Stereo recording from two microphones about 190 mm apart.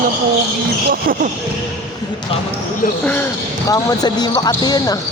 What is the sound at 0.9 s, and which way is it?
Speech, 50° right (ahead or behind).